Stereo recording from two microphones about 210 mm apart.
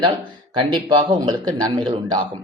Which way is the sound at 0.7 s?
20° right (ahead or behind).